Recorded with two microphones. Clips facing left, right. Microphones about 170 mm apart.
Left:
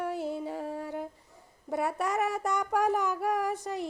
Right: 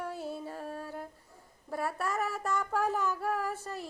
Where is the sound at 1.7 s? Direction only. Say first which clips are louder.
Left 4 dB; 20° left (ahead or behind).